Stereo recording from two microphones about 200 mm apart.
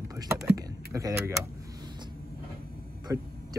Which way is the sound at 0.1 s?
15° right (ahead or behind).